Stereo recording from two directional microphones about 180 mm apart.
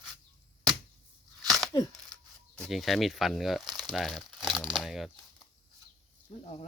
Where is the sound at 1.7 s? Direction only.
20° left (ahead or behind).